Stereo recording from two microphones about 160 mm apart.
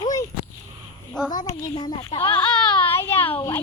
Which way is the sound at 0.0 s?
25° left (ahead or behind).